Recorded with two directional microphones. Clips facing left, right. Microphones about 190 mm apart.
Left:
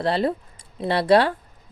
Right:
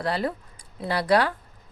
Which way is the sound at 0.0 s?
25° left (ahead or behind).